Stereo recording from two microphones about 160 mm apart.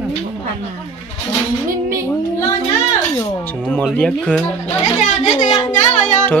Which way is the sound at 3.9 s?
5° left (ahead or behind).